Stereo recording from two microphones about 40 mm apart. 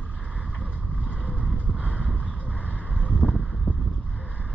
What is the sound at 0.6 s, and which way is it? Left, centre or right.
Vehicle, left.